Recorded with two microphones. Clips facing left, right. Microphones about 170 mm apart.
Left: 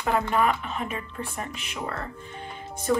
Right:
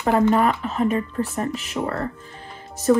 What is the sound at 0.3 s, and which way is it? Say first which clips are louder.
Speech: right 5 dB; 40° right (ahead or behind).